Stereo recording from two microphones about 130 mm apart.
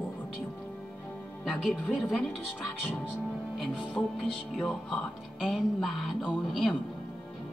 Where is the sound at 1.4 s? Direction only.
Centre (ahead or behind).